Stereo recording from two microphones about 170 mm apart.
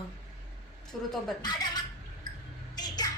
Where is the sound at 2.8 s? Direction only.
25° left (ahead or behind).